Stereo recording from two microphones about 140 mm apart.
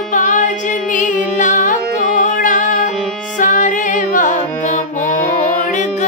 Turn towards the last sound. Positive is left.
turn(degrees=65)  # may be behind; listen again after turning